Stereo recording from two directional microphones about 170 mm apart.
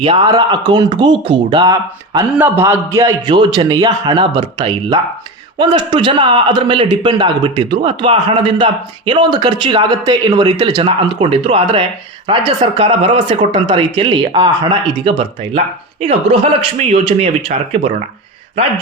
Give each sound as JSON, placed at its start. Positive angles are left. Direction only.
{"t": 0.0, "sound": "a man's voice", "side_deg": -30}
{"t": 2.3, "sound": "a man's voice", "side_deg": -10}
{"t": 15.5, "sound": "speech", "side_deg": -40}